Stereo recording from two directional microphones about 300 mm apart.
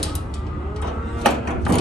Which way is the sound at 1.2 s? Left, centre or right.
Centre.